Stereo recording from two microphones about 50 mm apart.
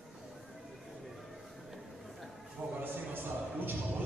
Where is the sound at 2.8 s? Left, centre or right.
Right.